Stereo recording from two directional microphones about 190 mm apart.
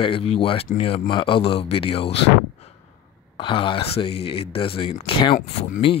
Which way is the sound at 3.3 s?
25° left (ahead or behind).